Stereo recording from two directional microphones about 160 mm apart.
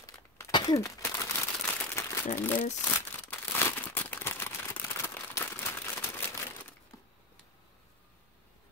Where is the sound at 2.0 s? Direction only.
15° left (ahead or behind).